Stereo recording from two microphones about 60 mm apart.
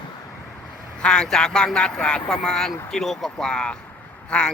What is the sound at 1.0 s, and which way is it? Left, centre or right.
Speech, centre.